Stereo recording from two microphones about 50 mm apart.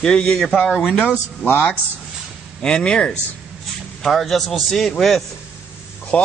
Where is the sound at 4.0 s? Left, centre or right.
Centre.